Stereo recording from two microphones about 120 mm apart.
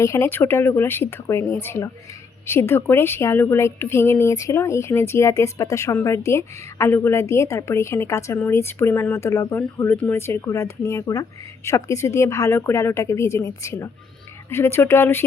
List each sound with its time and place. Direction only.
0.0 s a woman's voice: 20° left (ahead or behind)